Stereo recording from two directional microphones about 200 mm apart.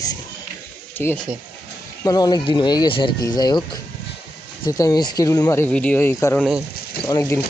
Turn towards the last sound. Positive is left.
turn(degrees=15)  # may be behind; listen again after turning